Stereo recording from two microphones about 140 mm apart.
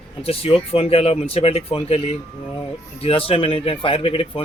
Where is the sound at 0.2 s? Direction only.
45° left (ahead or behind).